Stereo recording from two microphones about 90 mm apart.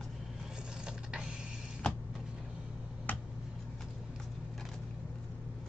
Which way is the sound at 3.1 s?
20° left (ahead or behind).